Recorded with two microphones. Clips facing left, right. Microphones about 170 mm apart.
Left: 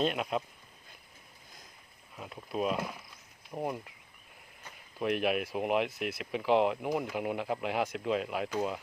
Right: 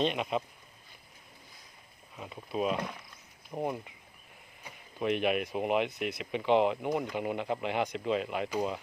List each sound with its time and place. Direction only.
0.0 s speech: centre (ahead or behind)
2.1 s speech: centre (ahead or behind)
4.9 s speech: centre (ahead or behind)